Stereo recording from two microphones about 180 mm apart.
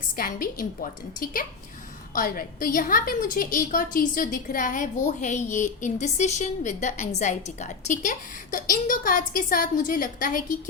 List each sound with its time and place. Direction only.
0.2 s a woman's voice: 50° left (ahead or behind)